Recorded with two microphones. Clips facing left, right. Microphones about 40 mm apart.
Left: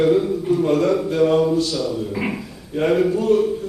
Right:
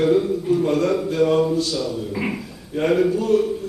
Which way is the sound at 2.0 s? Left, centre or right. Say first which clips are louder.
Left 1 dB; centre.